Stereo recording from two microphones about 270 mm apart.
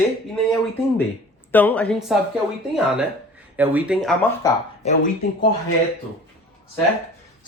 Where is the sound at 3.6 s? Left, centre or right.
Centre.